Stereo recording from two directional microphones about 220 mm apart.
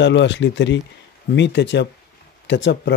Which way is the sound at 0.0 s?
55° left (ahead or behind).